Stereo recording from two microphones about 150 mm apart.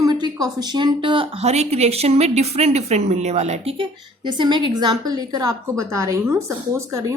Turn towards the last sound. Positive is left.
turn(degrees=-20)  # may be behind; listen again after turning